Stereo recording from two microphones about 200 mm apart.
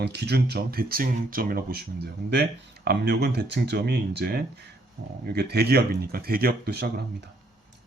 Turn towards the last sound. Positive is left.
turn(degrees=-55)  # may be behind; listen again after turning